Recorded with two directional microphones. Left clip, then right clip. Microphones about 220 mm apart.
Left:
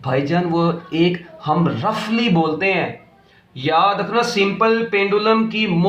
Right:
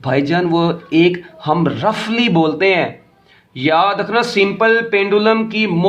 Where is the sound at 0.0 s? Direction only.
45° right (ahead or behind).